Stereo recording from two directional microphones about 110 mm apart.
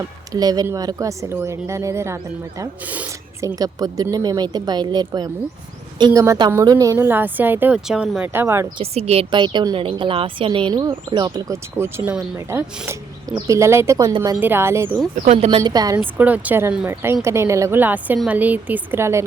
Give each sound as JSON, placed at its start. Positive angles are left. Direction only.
{"t": 0.3, "sound": "a woman's voice", "side_deg": -35}
{"t": 2.8, "sound": "a woman's voice", "side_deg": -15}
{"t": 3.4, "sound": "a woman's voice", "side_deg": -35}
{"t": 7.9, "sound": "a woman's voice", "side_deg": -5}
{"t": 8.3, "sound": "a woman's voice", "side_deg": -20}
{"t": 8.8, "sound": "a woman's voice", "side_deg": -65}
{"t": 9.3, "sound": "a woman's voice", "side_deg": -45}
{"t": 15.1, "sound": "speech", "side_deg": -90}
{"t": 15.4, "sound": "speech", "side_deg": -45}
{"t": 16.1, "sound": "a woman's voice", "side_deg": -15}